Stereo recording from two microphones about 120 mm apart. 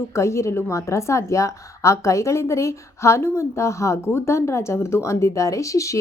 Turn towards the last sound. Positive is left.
turn(degrees=25)  # may be behind; listen again after turning